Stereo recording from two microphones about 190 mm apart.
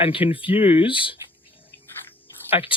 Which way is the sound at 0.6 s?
10° right (ahead or behind).